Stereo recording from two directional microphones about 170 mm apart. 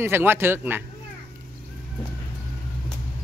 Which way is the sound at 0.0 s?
15° right (ahead or behind).